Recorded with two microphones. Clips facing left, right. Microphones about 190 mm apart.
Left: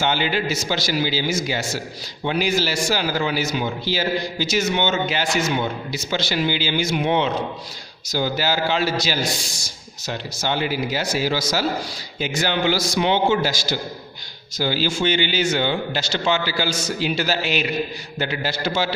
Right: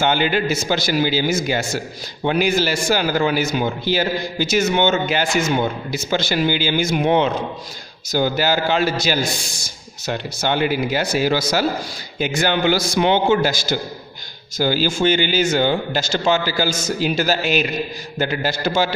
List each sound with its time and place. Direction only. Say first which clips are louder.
0.0 s a man's voice: right 3 dB; 50° right (ahead or behind)